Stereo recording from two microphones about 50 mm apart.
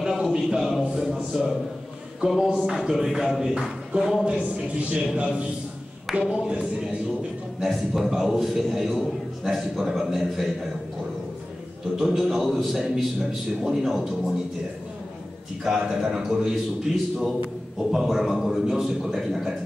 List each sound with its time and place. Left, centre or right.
0.0 s a sound: centre
0.6 s music: centre
2.2 s a man's voice: centre
4.9 s a man's voice: right
7.6 s a man's voice: centre
12.0 s a man's voice: centre
15.6 s a man's voice: centre